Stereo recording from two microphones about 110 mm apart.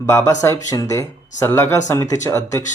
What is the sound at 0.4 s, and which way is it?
Speech, 25° left (ahead or behind).